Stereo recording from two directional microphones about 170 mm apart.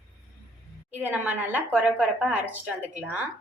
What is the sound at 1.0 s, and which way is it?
A woman's voice, 10° right (ahead or behind).